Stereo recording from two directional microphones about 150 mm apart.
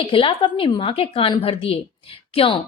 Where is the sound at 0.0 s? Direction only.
35° left (ahead or behind).